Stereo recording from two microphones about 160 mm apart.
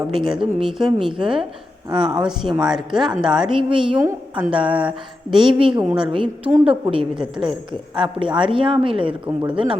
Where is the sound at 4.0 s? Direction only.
15° right (ahead or behind).